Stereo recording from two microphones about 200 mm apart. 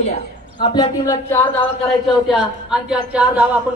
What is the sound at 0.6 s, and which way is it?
Speech, 20° left (ahead or behind).